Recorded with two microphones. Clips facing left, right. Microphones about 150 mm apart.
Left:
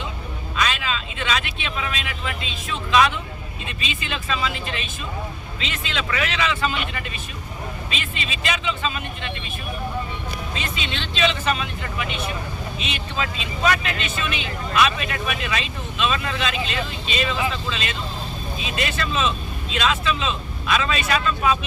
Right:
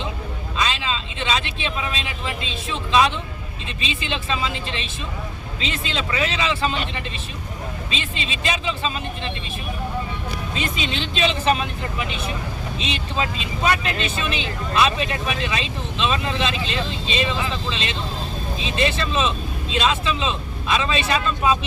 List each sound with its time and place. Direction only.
0.5 s speech: 25° right (ahead or behind)
11.2 s speech: 35° right (ahead or behind)